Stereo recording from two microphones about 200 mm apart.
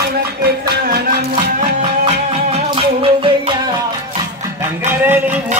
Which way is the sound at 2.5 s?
25° right (ahead or behind).